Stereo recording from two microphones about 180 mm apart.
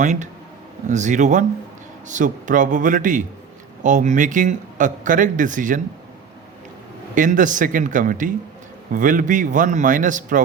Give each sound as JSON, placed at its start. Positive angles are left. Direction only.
{"t": 0.0, "sound": "speech", "side_deg": -40}
{"t": 7.2, "sound": "speech", "side_deg": -45}